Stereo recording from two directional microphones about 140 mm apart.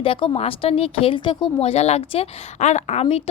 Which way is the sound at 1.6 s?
50° left (ahead or behind).